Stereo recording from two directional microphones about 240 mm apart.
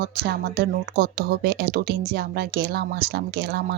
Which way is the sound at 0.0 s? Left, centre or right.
Right.